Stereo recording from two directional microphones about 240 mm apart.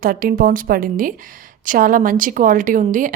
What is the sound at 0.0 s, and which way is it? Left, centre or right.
A woman's voice, right.